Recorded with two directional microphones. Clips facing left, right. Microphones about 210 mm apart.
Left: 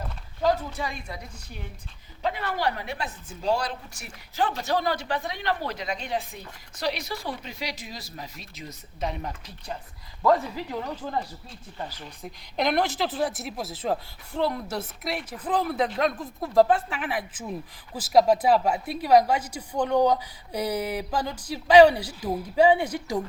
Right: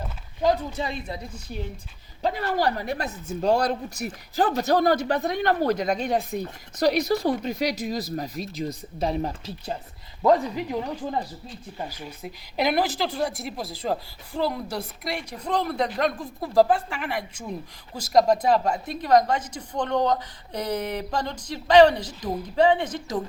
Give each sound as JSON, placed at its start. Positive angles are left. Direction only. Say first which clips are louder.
{"t": 0.4, "sound": "speech", "louder": "right 2 dB", "side_deg": -20}
{"t": 2.2, "sound": "speech", "louder": "right 3 dB", "side_deg": -40}
{"t": 10.5, "sound": "a woman's voice", "louder": "right 4 dB", "side_deg": -15}